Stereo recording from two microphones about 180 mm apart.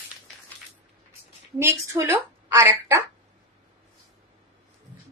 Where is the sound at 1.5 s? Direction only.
15° right (ahead or behind).